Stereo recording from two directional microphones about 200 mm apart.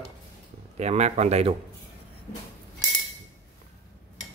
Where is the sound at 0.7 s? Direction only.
35° right (ahead or behind).